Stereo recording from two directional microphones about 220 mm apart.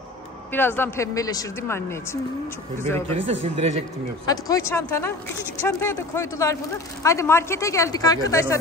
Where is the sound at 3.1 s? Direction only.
30° right (ahead or behind).